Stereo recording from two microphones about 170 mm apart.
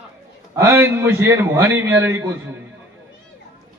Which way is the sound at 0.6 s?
15° right (ahead or behind).